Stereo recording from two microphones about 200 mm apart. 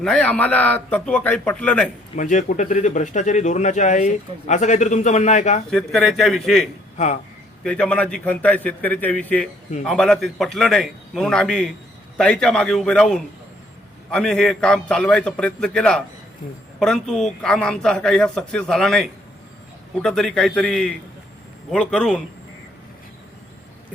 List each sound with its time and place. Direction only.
0.0 s a man's voice: 5° left (ahead or behind)
2.1 s speech: 40° left (ahead or behind)
5.7 s a man's voice: centre (ahead or behind)
6.9 s a man's voice: 35° left (ahead or behind)
7.6 s a man's voice: 5° left (ahead or behind)